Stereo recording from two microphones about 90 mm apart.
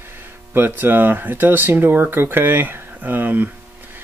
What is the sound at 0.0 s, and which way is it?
Speech, 25° right (ahead or behind).